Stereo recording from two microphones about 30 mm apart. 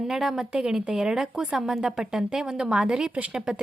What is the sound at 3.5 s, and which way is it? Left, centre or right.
Speech, right.